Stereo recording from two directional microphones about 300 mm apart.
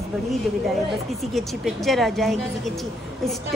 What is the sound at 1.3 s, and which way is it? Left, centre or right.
A woman's voice, centre.